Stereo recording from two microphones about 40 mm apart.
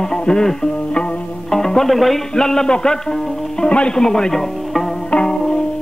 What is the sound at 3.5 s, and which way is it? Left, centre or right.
Speech, left.